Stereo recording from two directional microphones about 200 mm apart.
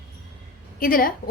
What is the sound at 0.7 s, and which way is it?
Speech, 45° left (ahead or behind).